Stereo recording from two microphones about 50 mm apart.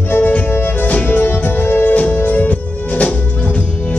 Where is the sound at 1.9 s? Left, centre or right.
Left.